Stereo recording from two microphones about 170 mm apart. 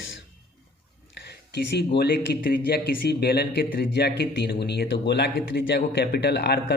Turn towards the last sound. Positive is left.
turn(degrees=75)  # may be behind; listen again after turning